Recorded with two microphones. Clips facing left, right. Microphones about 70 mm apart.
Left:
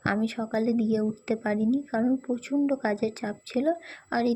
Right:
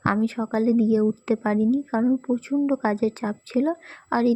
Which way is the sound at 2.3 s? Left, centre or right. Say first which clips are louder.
Right 3 dB; right.